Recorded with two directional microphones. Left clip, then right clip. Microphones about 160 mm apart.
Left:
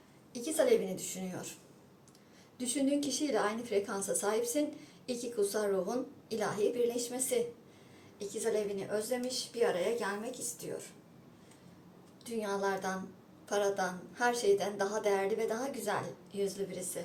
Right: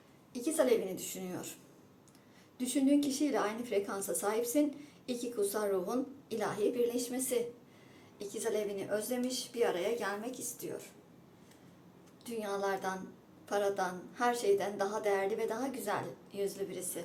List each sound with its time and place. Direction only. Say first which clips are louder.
0.3 s a woman's voice: left 1 dB; 20° right (ahead or behind)
2.6 s a woman's voice: right 2 dB; 15° right (ahead or behind)
12.2 s a woman's voice: left 1 dB; 20° right (ahead or behind)